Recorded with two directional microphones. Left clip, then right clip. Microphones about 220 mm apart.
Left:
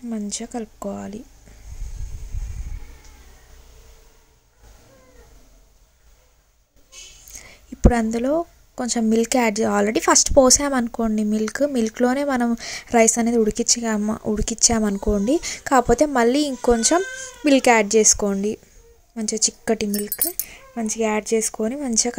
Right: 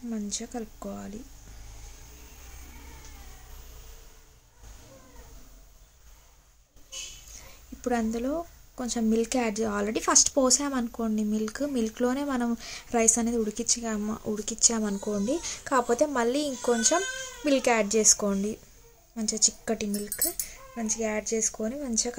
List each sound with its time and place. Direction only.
0.1 s speech: 25° left (ahead or behind)
7.4 s speech: 30° left (ahead or behind)